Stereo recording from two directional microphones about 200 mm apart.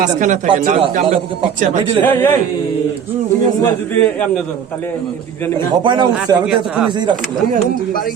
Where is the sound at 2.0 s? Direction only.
10° left (ahead or behind).